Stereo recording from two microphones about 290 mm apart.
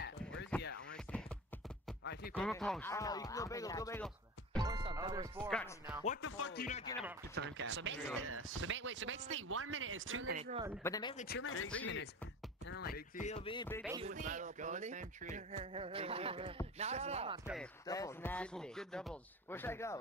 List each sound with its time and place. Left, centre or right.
0.0 s a sound: left
2.3 s a man's voice: centre
4.6 s music: centre
5.5 s speech: centre
6.2 s speech: left
6.9 s a man's voice: centre
7.3 s a man's voice: right
10.3 s speech: centre
10.8 s a man's voice: centre
11.1 s speech: left
12.6 s speech: left; by 13.8 s centre
14.0 s speech: right
17.8 s a man's voice: centre